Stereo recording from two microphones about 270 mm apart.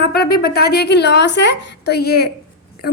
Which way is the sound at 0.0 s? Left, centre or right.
Left.